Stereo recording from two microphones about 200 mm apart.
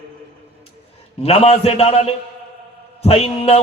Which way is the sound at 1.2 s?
30° left (ahead or behind).